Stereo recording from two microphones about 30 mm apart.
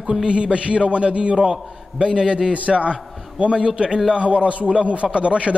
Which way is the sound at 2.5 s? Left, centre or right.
Right.